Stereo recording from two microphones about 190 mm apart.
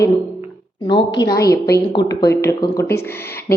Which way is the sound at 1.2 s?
20° left (ahead or behind).